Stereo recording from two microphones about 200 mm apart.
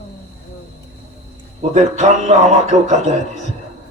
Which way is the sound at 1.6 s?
35° right (ahead or behind).